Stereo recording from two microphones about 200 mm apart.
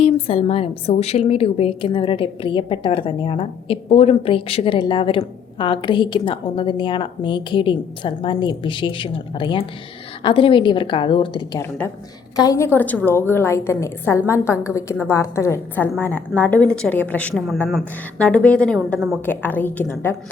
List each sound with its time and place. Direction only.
0.0 s a woman's voice: 30° left (ahead or behind)
11.8 s a woman's voice: 10° left (ahead or behind)